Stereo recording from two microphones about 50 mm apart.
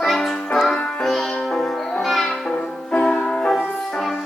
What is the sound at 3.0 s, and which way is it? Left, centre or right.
Music, centre.